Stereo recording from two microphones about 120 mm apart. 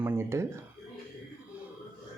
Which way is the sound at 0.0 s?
20° right (ahead or behind).